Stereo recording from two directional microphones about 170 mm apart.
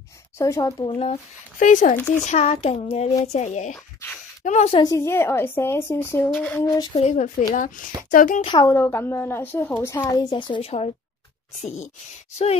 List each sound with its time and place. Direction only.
0.4 s speech: 20° left (ahead or behind)
0.9 s speech: 35° left (ahead or behind)
2.0 s speech: 10° left (ahead or behind)
2.2 s a child's voice: 40° left (ahead or behind)
4.7 s speech: 20° left (ahead or behind)
7.0 s speech: 45° left (ahead or behind)
8.5 s speech: 20° left (ahead or behind)
10.3 s a child's voice: 30° left (ahead or behind)